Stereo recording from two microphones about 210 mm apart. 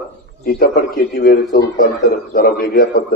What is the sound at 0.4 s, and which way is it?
A man's voice, 50° left (ahead or behind).